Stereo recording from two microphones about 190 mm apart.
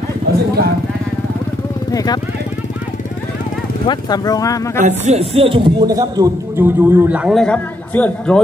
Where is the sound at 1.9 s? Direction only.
20° left (ahead or behind).